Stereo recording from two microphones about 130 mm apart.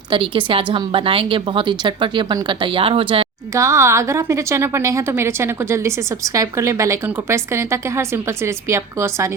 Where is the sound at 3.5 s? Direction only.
20° right (ahead or behind).